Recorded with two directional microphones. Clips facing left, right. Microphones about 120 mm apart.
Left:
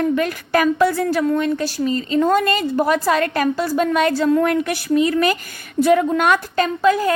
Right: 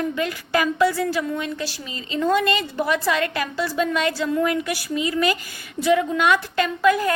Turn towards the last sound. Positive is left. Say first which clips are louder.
# left 3 dB
turn(degrees=30)  # may be behind; listen again after turning